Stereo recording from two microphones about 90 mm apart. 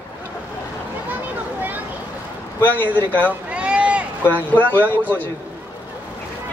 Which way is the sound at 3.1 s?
15° right (ahead or behind).